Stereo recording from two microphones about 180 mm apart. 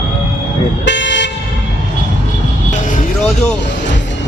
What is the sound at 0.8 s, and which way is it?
Toot, 80° left.